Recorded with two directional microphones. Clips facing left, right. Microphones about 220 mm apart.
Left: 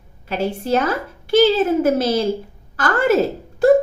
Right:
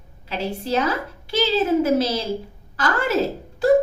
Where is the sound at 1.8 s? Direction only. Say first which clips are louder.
Left 3 dB; 50° left (ahead or behind).